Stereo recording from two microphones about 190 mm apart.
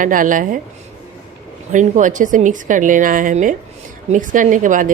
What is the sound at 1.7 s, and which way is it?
Speech, 40° right (ahead or behind).